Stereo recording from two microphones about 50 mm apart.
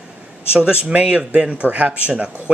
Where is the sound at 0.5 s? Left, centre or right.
Right.